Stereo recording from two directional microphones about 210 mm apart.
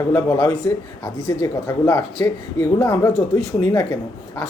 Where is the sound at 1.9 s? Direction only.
20° left (ahead or behind).